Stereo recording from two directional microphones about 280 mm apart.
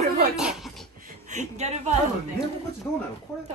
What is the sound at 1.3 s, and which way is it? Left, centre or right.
Speech, right.